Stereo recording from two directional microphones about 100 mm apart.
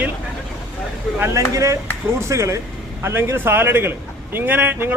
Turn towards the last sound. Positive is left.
turn(degrees=-20)  # may be behind; listen again after turning